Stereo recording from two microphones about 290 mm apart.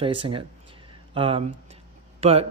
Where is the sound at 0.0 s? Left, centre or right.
Centre.